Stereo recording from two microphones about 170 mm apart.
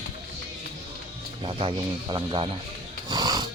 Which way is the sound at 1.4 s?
30° right (ahead or behind).